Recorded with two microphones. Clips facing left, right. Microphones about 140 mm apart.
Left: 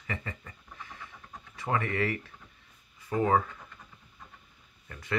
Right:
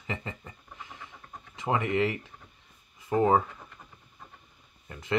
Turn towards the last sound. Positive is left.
turn(degrees=-20)  # may be behind; listen again after turning